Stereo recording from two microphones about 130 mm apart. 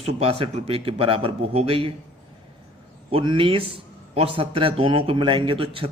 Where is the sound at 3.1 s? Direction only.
40° right (ahead or behind).